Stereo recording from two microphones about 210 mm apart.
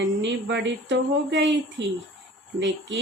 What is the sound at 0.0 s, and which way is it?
Speech, 55° right (ahead or behind).